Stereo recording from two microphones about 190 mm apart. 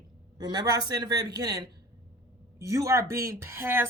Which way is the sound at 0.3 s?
20° right (ahead or behind).